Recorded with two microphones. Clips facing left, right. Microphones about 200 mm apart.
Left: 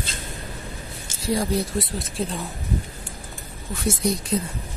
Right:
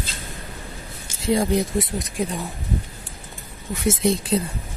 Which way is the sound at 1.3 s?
20° right (ahead or behind).